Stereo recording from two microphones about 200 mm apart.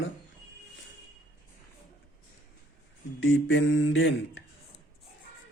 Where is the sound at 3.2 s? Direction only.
75° left (ahead or behind).